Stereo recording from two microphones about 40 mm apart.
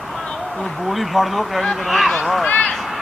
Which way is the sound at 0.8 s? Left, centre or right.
Centre.